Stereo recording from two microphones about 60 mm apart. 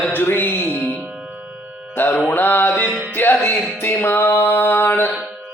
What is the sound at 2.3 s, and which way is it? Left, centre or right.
Music, left.